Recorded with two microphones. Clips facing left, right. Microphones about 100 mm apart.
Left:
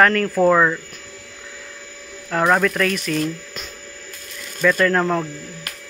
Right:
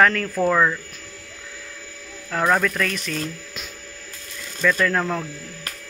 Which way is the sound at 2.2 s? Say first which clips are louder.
Left 3 dB; 15° left (ahead or behind).